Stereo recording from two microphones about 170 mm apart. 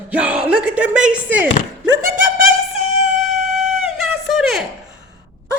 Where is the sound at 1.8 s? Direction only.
75° right (ahead or behind).